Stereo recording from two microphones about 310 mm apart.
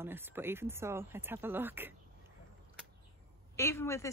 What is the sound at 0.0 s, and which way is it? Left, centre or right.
Speech, centre.